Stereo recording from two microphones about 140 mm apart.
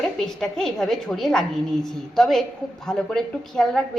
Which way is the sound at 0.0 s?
5° left (ahead or behind).